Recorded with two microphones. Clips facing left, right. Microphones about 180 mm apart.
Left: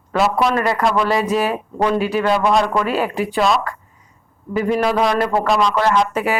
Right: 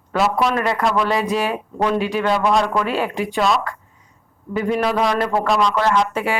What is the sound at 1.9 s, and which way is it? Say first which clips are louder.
Speech: left 2 dB; 40° left (ahead or behind).